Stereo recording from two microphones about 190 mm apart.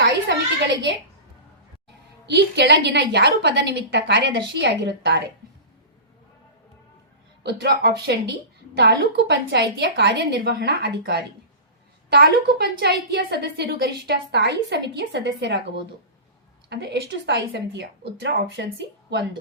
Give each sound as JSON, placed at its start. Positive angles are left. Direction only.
{"t": 0.0, "sound": "a sound", "side_deg": -65}
{"t": 2.3, "sound": "a woman's voice", "side_deg": -60}
{"t": 7.4, "sound": "a woman's voice", "side_deg": -60}